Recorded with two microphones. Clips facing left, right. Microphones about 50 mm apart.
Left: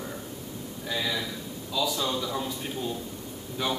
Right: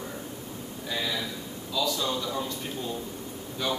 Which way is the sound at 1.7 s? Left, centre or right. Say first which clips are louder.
Even; centre.